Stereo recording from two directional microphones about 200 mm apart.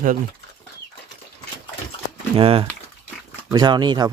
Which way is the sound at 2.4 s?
30° right (ahead or behind).